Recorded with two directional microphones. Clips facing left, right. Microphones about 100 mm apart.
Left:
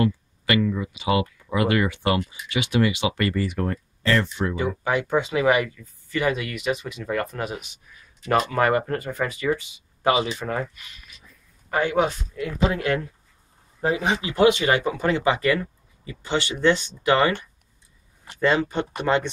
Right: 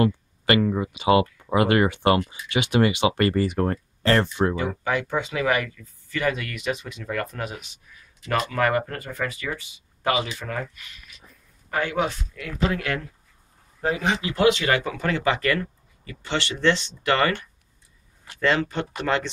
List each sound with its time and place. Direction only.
0.6 s speech: 40° right (ahead or behind)
2.2 s speech: 50° right (ahead or behind)
4.8 s speech: 15° left (ahead or behind)
8.3 s speech: 30° left (ahead or behind)
11.7 s a man's voice: 20° left (ahead or behind)